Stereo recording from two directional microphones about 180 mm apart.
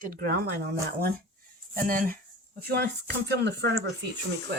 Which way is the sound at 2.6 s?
65° right (ahead or behind).